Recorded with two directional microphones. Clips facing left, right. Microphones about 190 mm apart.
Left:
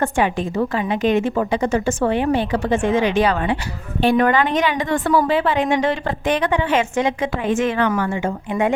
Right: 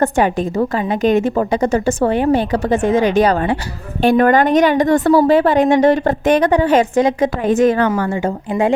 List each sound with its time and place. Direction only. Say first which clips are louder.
0.0 s a woman's voice: right 4 dB; 40° right (ahead or behind)